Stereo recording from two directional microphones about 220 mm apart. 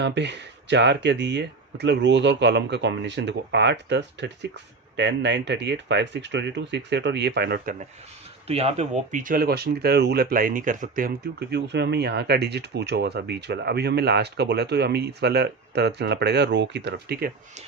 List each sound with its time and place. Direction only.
0.0 s speech: 55° right (ahead or behind)
8.4 s speech: 30° right (ahead or behind); by 17.3 s 45° right (ahead or behind)